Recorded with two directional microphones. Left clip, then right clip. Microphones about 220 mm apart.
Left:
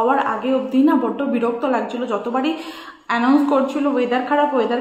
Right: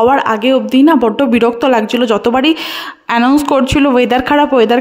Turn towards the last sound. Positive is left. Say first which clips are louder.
# right 8 dB
turn(degrees=-45)  # may be behind; listen again after turning